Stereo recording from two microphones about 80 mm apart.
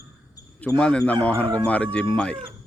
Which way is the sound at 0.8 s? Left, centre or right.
Centre.